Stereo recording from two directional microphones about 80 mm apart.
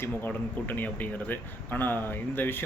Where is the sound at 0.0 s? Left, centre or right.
Left.